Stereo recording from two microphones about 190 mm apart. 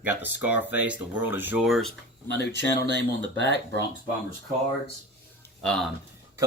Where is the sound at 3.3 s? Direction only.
65° left (ahead or behind).